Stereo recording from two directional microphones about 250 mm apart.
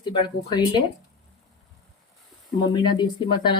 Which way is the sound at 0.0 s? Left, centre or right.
Centre.